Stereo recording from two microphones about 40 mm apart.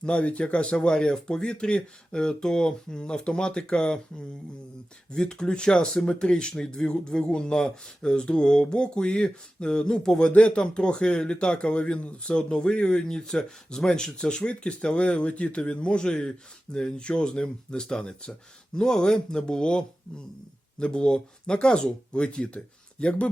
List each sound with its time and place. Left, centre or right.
0.0 s speech: left
5.1 s speech: centre
10.2 s speech: left